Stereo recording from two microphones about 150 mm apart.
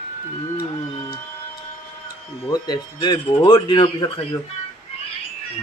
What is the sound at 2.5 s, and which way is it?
Speech, 30° left (ahead or behind).